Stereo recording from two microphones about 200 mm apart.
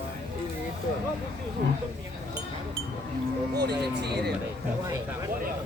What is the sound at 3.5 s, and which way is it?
Speech, 55° right (ahead or behind).